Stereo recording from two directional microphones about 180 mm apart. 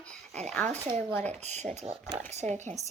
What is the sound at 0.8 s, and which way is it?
Speech, 25° right (ahead or behind).